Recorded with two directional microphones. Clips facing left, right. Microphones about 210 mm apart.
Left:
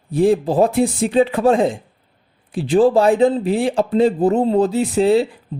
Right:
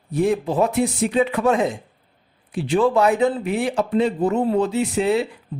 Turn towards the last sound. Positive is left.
turn(degrees=30)  # may be behind; listen again after turning